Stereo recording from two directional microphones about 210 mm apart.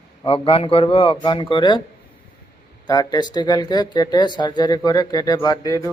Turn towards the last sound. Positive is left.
turn(degrees=15)  # may be behind; listen again after turning